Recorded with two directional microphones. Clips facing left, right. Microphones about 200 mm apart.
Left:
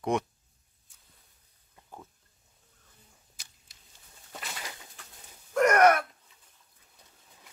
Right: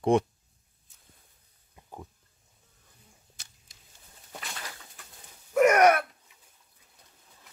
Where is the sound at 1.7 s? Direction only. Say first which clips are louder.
Right 3 dB; 15° right (ahead or behind).